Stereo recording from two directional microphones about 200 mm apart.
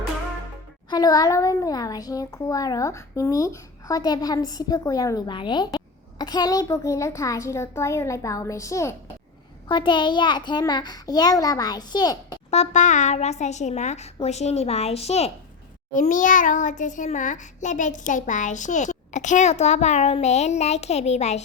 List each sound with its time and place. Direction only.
0.9 s a child's voice: 20° left (ahead or behind)
12.5 s a child's voice: 35° left (ahead or behind)